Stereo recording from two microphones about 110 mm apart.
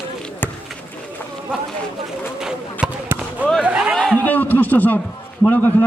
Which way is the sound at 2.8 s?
5° right (ahead or behind).